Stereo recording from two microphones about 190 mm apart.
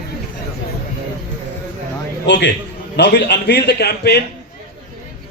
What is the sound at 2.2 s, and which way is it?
A man's voice, 65° left (ahead or behind).